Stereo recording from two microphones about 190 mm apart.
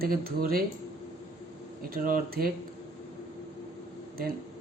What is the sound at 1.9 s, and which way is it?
Speech, 50° right (ahead or behind).